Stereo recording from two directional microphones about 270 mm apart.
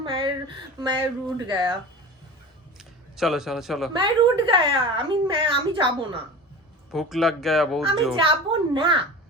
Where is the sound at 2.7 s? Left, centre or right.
Centre.